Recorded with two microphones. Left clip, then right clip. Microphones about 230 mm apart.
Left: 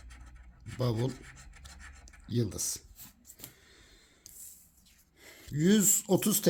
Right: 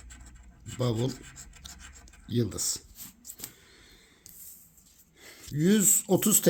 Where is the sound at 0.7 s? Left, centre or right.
Centre.